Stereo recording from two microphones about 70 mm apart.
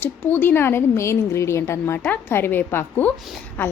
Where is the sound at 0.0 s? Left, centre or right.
Left.